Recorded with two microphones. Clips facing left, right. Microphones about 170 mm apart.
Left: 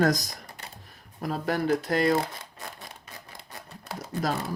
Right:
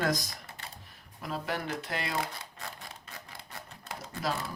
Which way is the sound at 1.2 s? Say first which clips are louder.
Left 7 dB; 40° left (ahead or behind).